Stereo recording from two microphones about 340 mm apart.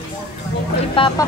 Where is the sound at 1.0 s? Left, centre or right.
Centre.